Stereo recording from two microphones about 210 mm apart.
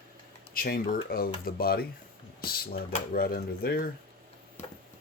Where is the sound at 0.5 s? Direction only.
45° left (ahead or behind).